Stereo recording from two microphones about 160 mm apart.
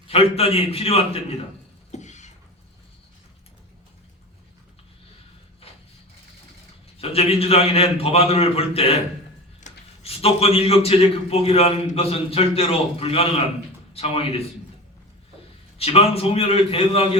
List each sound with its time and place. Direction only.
0.1 s a man's voice: 40° left (ahead or behind)
1.9 s a sound: 45° left (ahead or behind)
7.0 s a man's voice: 40° left (ahead or behind)
15.8 s a man's voice: 40° left (ahead or behind)